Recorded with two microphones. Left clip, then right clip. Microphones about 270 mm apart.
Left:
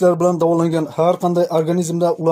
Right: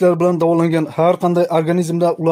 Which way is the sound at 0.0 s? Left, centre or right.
Right.